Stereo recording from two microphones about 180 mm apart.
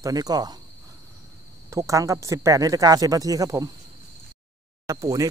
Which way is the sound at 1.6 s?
15° right (ahead or behind).